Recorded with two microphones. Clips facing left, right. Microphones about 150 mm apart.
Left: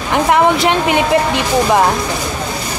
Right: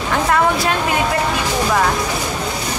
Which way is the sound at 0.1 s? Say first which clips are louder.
Left 5 dB; 20° left (ahead or behind).